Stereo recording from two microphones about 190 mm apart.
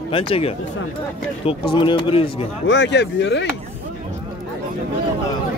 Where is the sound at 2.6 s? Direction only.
70° left (ahead or behind).